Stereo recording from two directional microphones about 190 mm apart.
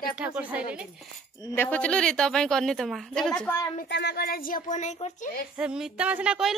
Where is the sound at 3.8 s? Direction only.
65° left (ahead or behind); by 5.2 s 35° left (ahead or behind).